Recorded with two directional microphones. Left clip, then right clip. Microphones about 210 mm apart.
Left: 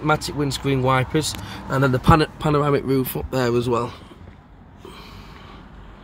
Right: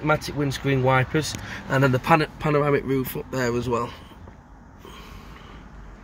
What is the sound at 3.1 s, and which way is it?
Speech, 30° left (ahead or behind).